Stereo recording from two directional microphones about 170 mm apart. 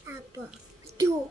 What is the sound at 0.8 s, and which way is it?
Bathtub, 20° right (ahead or behind).